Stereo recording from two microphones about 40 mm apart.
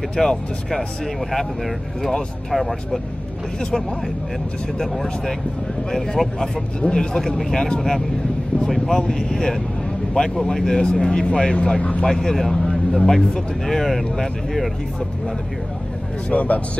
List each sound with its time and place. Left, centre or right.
0.1 s speech: centre
2.5 s speech: centre
4.7 s speech: centre
6.8 s speech: centre
12.1 s speech: centre
16.3 s speech: left